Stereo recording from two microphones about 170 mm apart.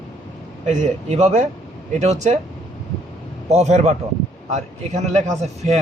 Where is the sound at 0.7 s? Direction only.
45° right (ahead or behind).